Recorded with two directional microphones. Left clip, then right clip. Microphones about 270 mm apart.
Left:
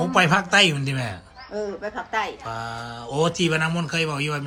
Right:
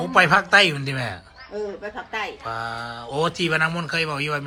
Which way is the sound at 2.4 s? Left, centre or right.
Centre.